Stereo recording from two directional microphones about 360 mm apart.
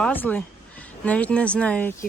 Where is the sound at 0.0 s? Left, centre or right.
Centre.